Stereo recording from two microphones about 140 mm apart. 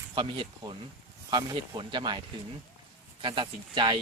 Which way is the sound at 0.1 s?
35° right (ahead or behind).